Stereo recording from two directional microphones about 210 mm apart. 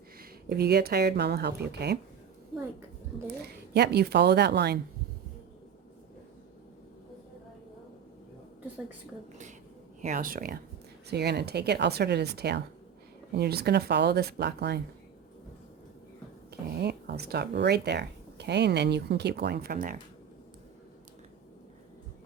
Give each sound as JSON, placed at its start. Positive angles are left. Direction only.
{"t": 0.2, "sound": "speech", "side_deg": -50}
{"t": 3.4, "sound": "speech", "side_deg": -50}
{"t": 10.0, "sound": "speech", "side_deg": -40}
{"t": 16.5, "sound": "speech", "side_deg": -50}